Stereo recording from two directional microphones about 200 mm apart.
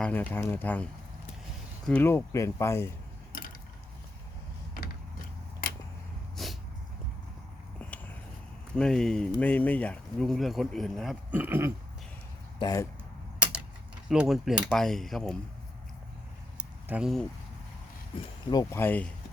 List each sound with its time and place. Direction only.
0.0 s speech: 5° left (ahead or behind)
1.9 s speech: 10° left (ahead or behind)
6.3 s dog: centre (ahead or behind)
7.8 s a sound: 5° left (ahead or behind)
8.7 s speech: 5° left (ahead or behind)
12.5 s speech: 20° left (ahead or behind)
14.1 s speech: centre (ahead or behind)
16.9 s speech: centre (ahead or behind)
18.5 s speech: 10° left (ahead or behind)